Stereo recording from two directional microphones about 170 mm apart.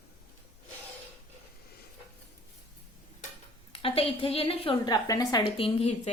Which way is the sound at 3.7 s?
30° left (ahead or behind).